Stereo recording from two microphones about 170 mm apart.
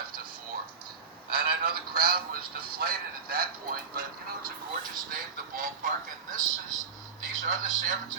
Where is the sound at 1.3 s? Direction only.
65° right (ahead or behind).